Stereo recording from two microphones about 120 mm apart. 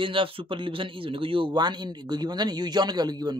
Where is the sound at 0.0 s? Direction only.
45° right (ahead or behind).